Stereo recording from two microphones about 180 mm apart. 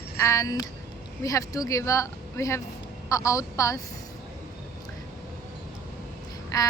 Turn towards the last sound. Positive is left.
turn(degrees=20)  # may be behind; listen again after turning